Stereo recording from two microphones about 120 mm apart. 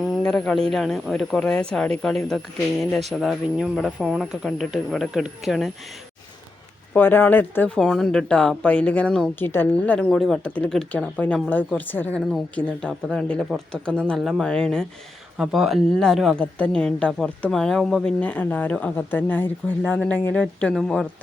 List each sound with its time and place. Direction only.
0.0 s speech: 5° left (ahead or behind)
6.9 s speech: 15° left (ahead or behind)
7.8 s speech: 5° left (ahead or behind)
10.4 s speech: 10° left (ahead or behind)